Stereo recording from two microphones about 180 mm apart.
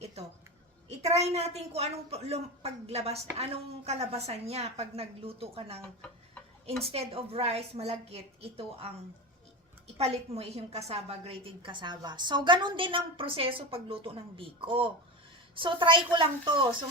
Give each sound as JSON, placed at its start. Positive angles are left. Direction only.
{"t": 0.0, "sound": "a sound", "side_deg": -35}
{"t": 0.9, "sound": "a woman's voice", "side_deg": -35}
{"t": 6.8, "sound": "a woman's voice", "side_deg": -35}